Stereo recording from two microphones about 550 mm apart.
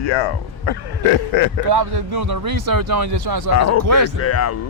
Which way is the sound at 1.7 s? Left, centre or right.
Right.